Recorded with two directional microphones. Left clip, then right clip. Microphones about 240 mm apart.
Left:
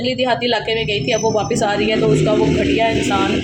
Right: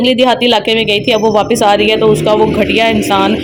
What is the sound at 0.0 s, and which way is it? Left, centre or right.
A woman's voice, right.